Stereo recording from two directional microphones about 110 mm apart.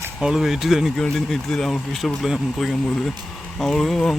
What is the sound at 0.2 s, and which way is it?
Speech, 5° right (ahead or behind).